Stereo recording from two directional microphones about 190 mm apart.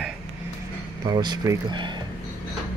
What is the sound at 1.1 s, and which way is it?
Speech, 20° right (ahead or behind).